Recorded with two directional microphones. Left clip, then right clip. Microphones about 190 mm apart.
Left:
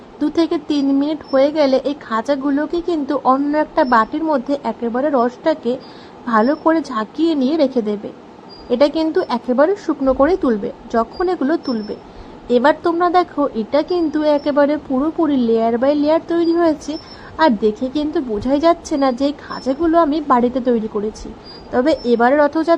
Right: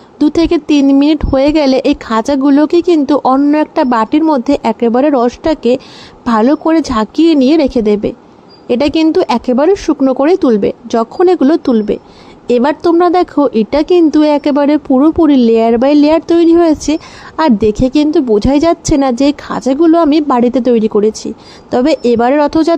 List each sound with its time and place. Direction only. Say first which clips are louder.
0.2 s speech: right 7 dB; 40° right (ahead or behind)